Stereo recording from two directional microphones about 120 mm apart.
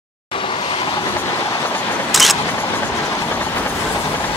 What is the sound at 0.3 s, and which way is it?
Vehicle, 45° left (ahead or behind).